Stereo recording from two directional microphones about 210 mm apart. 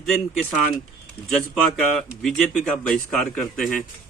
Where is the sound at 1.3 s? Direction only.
Centre (ahead or behind).